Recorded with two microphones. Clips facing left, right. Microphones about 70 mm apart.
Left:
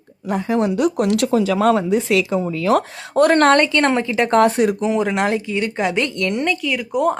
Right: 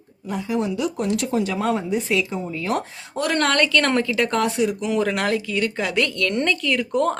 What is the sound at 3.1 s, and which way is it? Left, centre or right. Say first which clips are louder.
Speech: left 9 dB; left.